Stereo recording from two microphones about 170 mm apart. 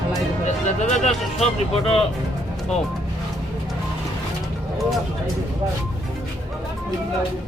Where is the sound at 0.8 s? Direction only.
45° left (ahead or behind).